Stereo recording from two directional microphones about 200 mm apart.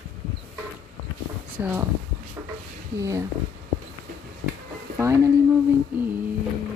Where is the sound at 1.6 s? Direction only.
10° right (ahead or behind).